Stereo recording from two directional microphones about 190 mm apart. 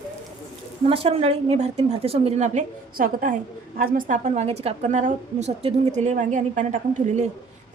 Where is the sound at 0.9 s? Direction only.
30° right (ahead or behind).